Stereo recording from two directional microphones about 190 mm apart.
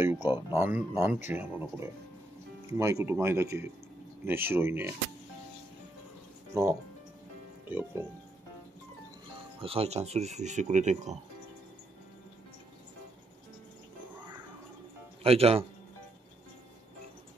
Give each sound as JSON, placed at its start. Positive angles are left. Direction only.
{"t": 0.0, "sound": "speech", "side_deg": -10}
{"t": 6.5, "sound": "speech", "side_deg": -15}
{"t": 9.6, "sound": "speech", "side_deg": -30}
{"t": 15.2, "sound": "speech", "side_deg": -30}